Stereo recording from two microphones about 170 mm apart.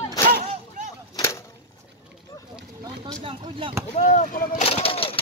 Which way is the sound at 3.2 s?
30° right (ahead or behind).